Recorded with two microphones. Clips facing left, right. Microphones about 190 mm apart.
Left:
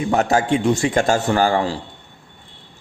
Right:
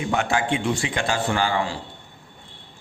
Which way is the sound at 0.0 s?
40° left (ahead or behind).